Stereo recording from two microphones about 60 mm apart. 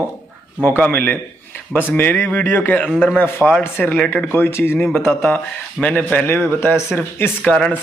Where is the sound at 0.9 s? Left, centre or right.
Left.